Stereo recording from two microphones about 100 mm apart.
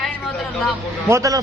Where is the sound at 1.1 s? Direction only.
35° right (ahead or behind).